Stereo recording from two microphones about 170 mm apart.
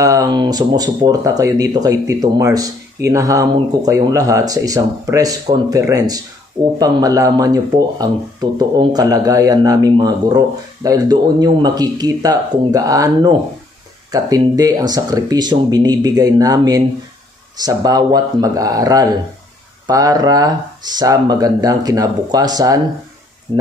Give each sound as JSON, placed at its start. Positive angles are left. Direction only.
{"t": 0.0, "sound": "speech", "side_deg": -20}